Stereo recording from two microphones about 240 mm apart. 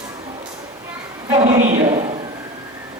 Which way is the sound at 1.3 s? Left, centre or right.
Right.